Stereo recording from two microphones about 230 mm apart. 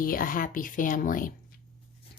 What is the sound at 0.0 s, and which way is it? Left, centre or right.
A woman's voice, left.